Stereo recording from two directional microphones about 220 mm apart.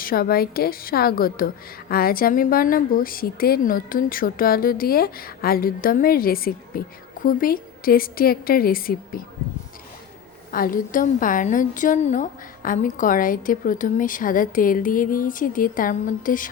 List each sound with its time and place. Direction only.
0.0 s a woman's voice: 40° left (ahead or behind)
10.5 s a woman's voice: 40° left (ahead or behind)